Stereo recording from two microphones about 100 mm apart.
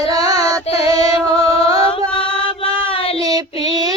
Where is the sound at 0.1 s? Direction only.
35° right (ahead or behind).